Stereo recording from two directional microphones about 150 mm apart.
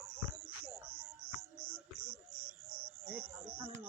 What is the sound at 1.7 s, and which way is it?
Music, 10° right (ahead or behind).